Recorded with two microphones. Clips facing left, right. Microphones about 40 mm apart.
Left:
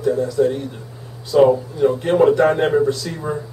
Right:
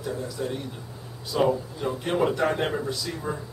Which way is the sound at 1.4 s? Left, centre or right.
Left.